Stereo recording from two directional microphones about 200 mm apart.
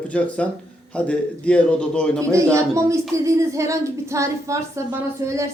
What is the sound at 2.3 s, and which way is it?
Speech, 15° right (ahead or behind).